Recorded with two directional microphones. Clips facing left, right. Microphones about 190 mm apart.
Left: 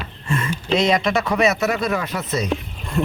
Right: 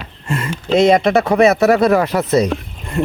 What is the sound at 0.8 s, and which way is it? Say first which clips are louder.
Speech: right 8 dB; 55° right (ahead or behind).